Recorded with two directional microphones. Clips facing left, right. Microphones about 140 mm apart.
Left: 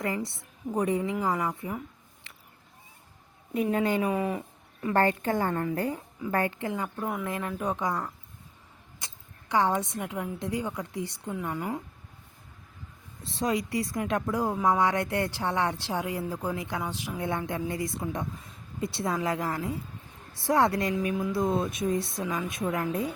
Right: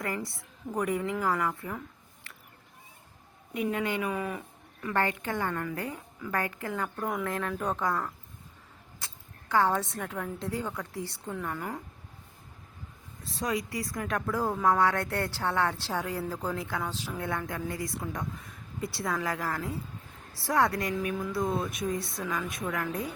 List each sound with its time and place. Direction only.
0.0 s a woman's voice: 25° left (ahead or behind)
3.5 s a woman's voice: 35° left (ahead or behind)
6.9 s a woman's voice: 5° left (ahead or behind)
9.5 s a woman's voice: 15° left (ahead or behind)
13.4 s a woman's voice: 25° left (ahead or behind)